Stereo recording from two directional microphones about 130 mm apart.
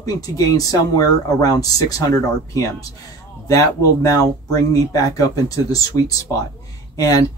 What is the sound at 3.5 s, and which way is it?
Speech, 25° left (ahead or behind).